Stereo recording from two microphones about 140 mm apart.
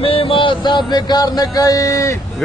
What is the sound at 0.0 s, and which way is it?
Music, 40° left (ahead or behind).